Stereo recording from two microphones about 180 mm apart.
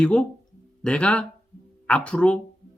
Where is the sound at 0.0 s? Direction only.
5° left (ahead or behind).